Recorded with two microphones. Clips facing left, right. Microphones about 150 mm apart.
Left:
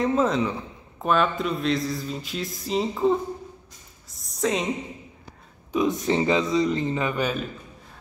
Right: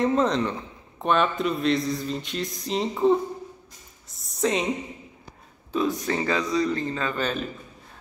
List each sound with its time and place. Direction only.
0.0 s mantra: 5° left (ahead or behind)
5.7 s speech: 15° left (ahead or behind)